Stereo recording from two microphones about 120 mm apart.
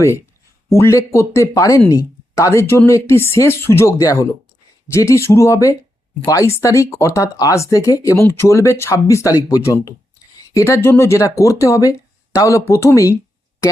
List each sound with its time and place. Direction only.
0.7 s speech: 20° left (ahead or behind)